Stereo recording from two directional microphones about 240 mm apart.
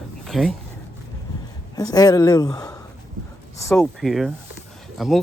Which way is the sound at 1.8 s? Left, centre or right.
Centre.